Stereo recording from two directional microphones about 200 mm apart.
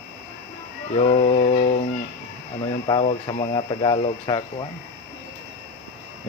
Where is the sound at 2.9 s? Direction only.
30° left (ahead or behind).